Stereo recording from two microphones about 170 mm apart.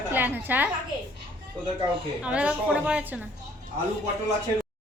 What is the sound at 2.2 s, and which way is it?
Speech, 5° right (ahead or behind).